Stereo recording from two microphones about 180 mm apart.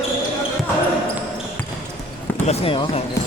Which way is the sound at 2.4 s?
35° left (ahead or behind).